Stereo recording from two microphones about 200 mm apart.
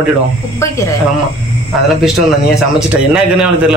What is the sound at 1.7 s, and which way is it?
Speech, centre (ahead or behind).